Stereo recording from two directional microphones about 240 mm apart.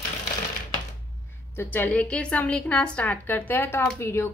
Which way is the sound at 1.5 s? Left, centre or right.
Centre.